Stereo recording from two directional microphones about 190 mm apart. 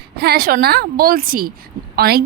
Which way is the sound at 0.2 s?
55° right (ahead or behind).